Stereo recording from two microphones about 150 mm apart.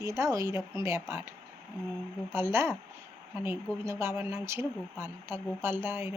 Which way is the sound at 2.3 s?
15° right (ahead or behind).